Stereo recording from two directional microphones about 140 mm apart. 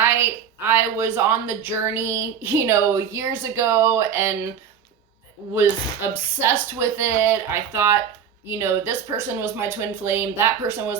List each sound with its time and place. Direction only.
0.0 s speech: 15° right (ahead or behind)
5.5 s speech: 20° right (ahead or behind)